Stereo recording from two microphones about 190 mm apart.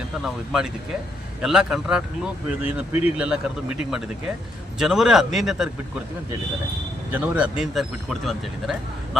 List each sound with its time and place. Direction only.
0.2 s speech: 5° right (ahead or behind)
7.1 s speech: 5° right (ahead or behind)